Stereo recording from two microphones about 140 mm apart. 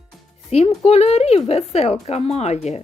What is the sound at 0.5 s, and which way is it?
Speech, 50° left (ahead or behind).